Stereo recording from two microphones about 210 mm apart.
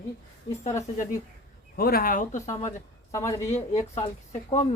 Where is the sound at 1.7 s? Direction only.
45° left (ahead or behind).